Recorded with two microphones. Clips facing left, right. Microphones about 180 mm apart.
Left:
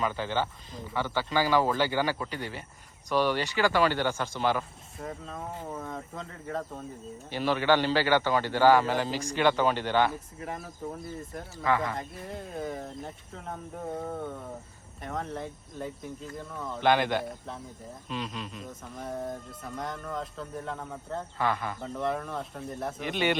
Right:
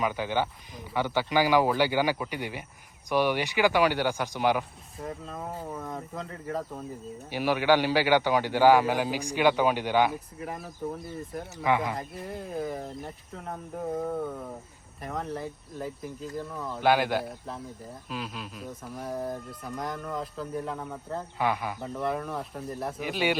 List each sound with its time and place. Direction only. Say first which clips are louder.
0.0 s a man's voice: right 2 dB; 15° right (ahead or behind)
4.9 s a man's voice: right 1 dB; centre (ahead or behind)
11.6 s a man's voice: right 1 dB; 15° right (ahead or behind)
11.9 s speech: right 1 dB; centre (ahead or behind)